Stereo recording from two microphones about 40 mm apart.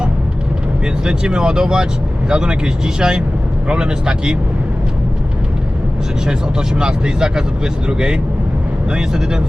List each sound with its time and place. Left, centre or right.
1.0 s speech: right
6.2 s speech: centre